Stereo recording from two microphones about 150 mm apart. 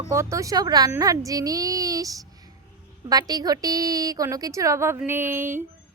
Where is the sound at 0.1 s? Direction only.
20° right (ahead or behind).